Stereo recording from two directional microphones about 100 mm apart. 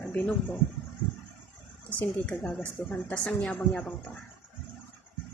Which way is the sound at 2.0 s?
10° left (ahead or behind).